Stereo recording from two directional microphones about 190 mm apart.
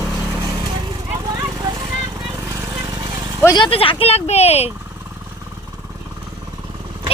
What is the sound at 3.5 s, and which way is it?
Speech, 25° left (ahead or behind).